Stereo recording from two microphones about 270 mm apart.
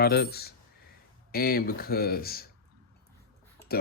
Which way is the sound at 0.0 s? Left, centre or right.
Left.